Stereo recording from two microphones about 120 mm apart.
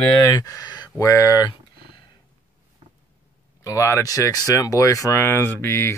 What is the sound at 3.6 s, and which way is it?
Speech, 25° left (ahead or behind).